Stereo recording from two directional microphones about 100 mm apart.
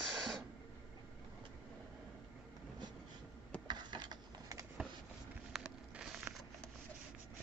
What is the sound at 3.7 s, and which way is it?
Mechanisms, 45° right (ahead or behind).